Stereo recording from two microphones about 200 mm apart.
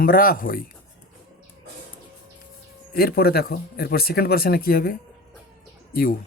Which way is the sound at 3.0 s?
50° left (ahead or behind).